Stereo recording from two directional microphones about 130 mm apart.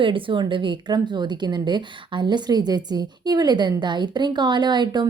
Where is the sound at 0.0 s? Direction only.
40° right (ahead or behind).